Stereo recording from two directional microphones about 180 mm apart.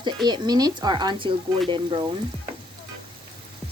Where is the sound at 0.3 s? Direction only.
20° right (ahead or behind).